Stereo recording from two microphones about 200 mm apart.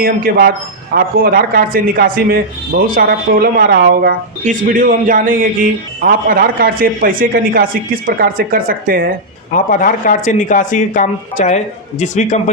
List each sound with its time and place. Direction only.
0.0 s speech: 50° right (ahead or behind)
9.5 s speech: 40° left (ahead or behind)